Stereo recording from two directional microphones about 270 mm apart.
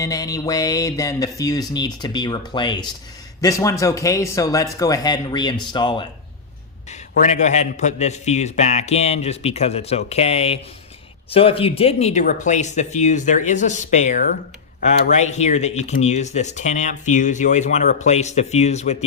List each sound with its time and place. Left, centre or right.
0.0 s speech: centre
7.3 s speech: left